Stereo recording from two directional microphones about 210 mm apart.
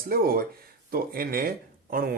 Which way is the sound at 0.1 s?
45° right (ahead or behind).